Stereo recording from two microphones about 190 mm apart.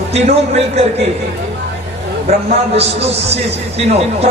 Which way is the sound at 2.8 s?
35° right (ahead or behind).